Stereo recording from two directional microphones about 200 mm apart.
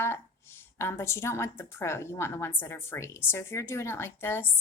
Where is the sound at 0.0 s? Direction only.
10° left (ahead or behind).